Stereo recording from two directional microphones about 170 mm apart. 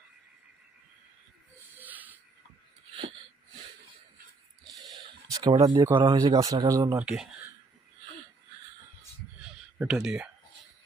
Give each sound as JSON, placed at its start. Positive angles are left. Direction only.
{"t": 1.8, "sound": "a sound", "side_deg": -10}
{"t": 5.3, "sound": "speech", "side_deg": -25}
{"t": 7.0, "sound": "speech", "side_deg": -5}
{"t": 9.7, "sound": "speech", "side_deg": -5}